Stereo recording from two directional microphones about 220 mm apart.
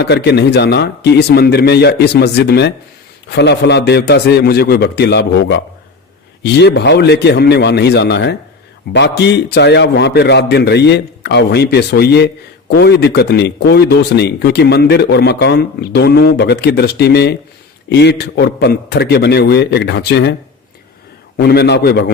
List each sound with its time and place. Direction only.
0.0 s a man's voice: 50° left (ahead or behind)
21.3 s a man's voice: 45° left (ahead or behind)